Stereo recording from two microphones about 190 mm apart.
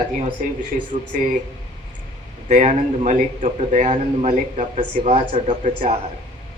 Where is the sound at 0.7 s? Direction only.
45° right (ahead or behind).